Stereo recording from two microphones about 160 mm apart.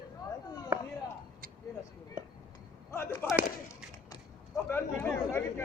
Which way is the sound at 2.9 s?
15° left (ahead or behind).